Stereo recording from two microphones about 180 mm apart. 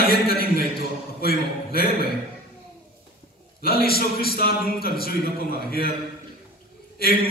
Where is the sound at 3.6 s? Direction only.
55° left (ahead or behind).